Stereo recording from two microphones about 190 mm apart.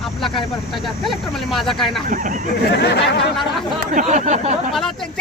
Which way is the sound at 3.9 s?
40° right (ahead or behind).